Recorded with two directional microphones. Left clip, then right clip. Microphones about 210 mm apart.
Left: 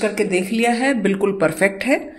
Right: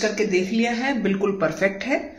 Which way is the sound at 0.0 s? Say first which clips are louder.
Left 2 dB; 50° left (ahead or behind).